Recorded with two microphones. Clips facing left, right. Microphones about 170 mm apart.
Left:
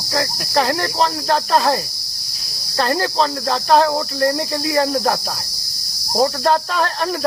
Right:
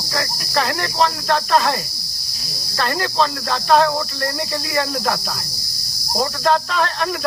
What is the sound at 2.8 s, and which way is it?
Cricket, 35° left (ahead or behind).